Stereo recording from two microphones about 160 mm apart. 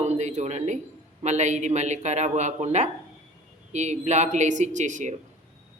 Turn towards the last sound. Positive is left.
turn(degrees=-50)  # may be behind; listen again after turning